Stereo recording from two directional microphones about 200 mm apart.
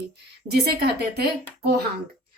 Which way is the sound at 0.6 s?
50° right (ahead or behind).